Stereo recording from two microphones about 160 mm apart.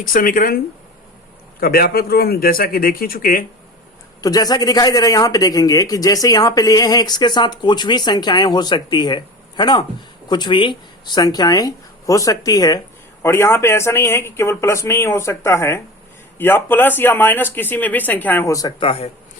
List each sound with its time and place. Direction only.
0.0 s speech: 60° left (ahead or behind)
1.6 s a man's voice: 70° left (ahead or behind)
4.2 s speech: 25° left (ahead or behind)
18.8 s a man's voice: 35° left (ahead or behind)